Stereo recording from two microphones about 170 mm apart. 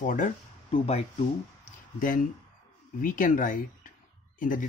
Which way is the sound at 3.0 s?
50° left (ahead or behind).